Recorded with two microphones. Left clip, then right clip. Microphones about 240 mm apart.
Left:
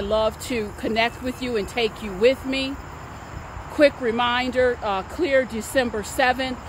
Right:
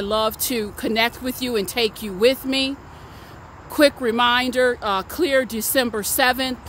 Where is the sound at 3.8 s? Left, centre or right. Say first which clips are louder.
Right 2 dB; right.